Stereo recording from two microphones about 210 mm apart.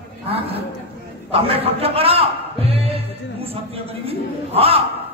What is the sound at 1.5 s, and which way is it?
A man's voice, 30° right (ahead or behind).